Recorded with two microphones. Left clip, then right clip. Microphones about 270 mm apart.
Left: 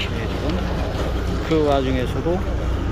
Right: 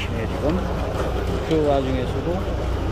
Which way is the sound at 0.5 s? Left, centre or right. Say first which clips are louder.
Right 1 dB; right.